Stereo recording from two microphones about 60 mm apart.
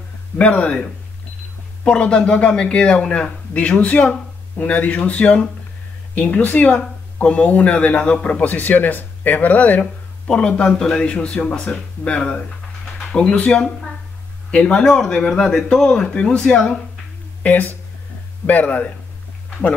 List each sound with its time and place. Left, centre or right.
0.6 s speech: centre
1.9 s speech: centre
17.4 s speech: left